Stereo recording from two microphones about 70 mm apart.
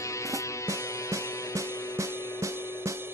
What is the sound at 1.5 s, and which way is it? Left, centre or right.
Music, right.